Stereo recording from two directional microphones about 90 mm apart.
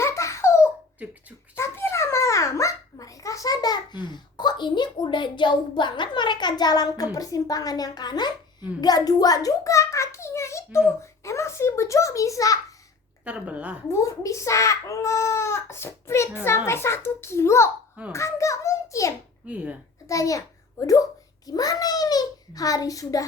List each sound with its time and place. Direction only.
0.0 s a sound: 35° left (ahead or behind)
11.0 s a child's voice: 35° left (ahead or behind)
13.2 s speech: 15° right (ahead or behind)
13.8 s a child's voice: 30° left (ahead or behind)
19.5 s speech: 15° right (ahead or behind)
20.1 s a child's voice: 40° left (ahead or behind)